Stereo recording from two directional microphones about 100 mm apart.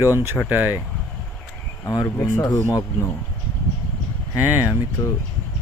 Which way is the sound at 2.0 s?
35° left (ahead or behind).